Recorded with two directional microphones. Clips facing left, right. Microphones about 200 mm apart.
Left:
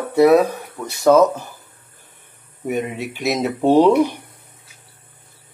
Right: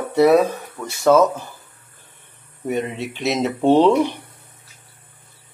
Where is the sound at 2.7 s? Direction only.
10° left (ahead or behind).